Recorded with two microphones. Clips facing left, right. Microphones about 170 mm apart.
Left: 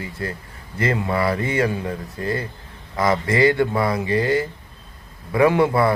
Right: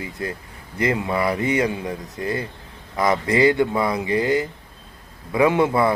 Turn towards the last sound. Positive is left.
turn(degrees=-20)  # may be behind; listen again after turning